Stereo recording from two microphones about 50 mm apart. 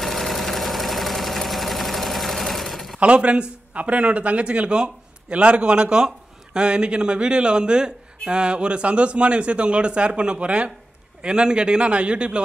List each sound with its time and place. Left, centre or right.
0.0 s engine: centre
3.0 s a man's voice: right